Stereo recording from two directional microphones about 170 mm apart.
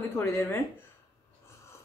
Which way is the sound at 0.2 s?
15° left (ahead or behind).